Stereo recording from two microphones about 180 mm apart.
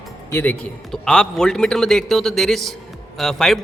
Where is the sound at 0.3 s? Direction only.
10° left (ahead or behind).